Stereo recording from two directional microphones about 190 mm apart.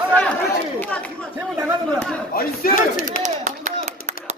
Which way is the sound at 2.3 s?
50° left (ahead or behind).